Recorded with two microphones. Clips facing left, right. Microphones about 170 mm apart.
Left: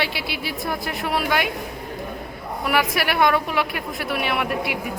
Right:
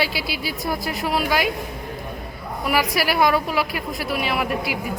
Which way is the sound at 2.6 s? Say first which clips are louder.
Right 1 dB; centre (ahead or behind).